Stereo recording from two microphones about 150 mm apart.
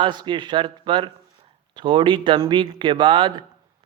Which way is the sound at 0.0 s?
30° right (ahead or behind).